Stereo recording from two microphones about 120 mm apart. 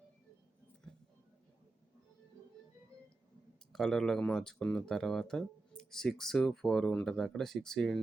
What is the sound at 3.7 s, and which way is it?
Speech, centre (ahead or behind).